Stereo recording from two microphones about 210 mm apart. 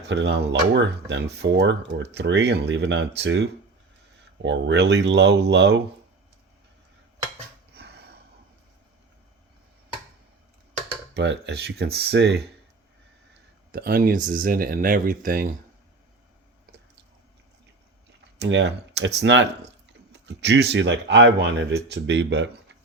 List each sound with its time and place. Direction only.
0.0 s speech: 55° right (ahead or behind)
4.4 s speech: 55° right (ahead or behind)
7.7 s a sound: 50° right (ahead or behind)
11.1 s speech: 55° right (ahead or behind)
13.7 s speech: 45° right (ahead or behind)
18.3 s speech: 55° right (ahead or behind)